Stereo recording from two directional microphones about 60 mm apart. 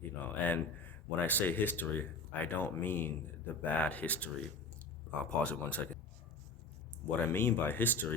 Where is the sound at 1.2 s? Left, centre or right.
Left.